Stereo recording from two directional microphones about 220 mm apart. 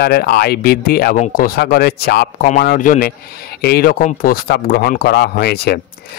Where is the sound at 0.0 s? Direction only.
45° left (ahead or behind).